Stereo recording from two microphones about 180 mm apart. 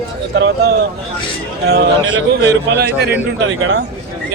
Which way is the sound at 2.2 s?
70° right (ahead or behind).